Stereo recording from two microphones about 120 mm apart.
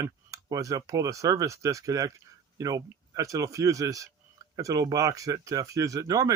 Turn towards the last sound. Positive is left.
turn(degrees=-30)  # may be behind; listen again after turning